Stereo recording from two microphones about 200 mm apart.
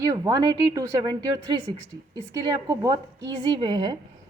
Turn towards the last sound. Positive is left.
turn(degrees=-20)  # may be behind; listen again after turning